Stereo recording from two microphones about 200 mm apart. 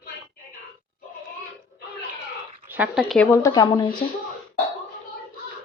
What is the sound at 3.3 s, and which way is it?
Speech, 15° left (ahead or behind).